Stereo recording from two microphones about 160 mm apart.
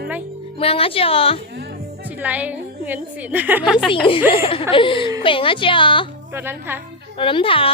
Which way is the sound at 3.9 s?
35° left (ahead or behind).